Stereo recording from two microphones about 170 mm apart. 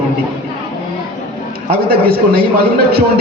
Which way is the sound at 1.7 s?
65° right (ahead or behind).